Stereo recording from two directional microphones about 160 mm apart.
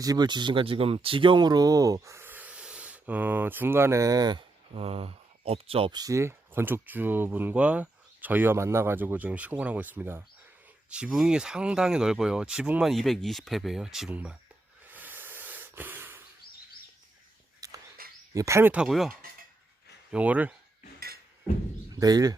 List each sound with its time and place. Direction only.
0.0 s speech: 25° right (ahead or behind)
4.7 s speech: 35° right (ahead or behind); by 14.3 s 5° right (ahead or behind)
14.8 s snort: 10° right (ahead or behind)
17.6 s bird: 20° right (ahead or behind)
18.0 s a sound: 65° right (ahead or behind)
18.3 s speech: 20° right (ahead or behind)
21.9 s speech: 20° right (ahead or behind)